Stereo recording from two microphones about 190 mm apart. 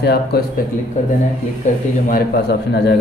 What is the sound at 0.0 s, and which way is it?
Speech, 60° left (ahead or behind).